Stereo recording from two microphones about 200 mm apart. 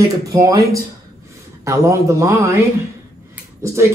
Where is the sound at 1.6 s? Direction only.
15° right (ahead or behind).